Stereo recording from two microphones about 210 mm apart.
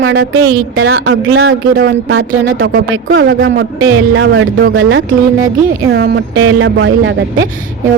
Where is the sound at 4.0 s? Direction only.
65° right (ahead or behind).